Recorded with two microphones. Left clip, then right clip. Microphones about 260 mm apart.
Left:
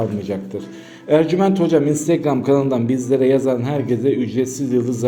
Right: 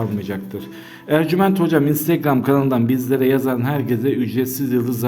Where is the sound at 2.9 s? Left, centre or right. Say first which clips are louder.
Left 4 dB; right.